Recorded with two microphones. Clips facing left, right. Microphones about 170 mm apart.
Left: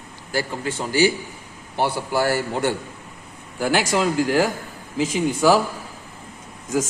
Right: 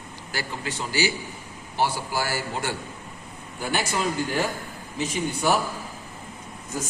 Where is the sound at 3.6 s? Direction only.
90° left.